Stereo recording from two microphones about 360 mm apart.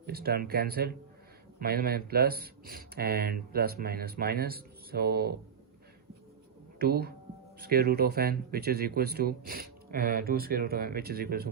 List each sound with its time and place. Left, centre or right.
0.0 s speech: right
6.7 s speech: right